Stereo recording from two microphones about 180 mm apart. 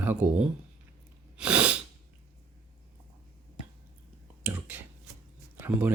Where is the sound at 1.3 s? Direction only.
5° right (ahead or behind).